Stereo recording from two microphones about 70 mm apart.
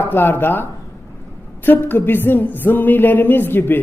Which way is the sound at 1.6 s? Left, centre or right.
Left.